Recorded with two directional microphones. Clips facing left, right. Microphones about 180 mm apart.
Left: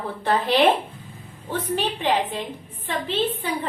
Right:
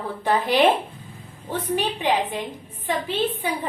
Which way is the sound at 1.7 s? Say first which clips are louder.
Even; 15° right (ahead or behind).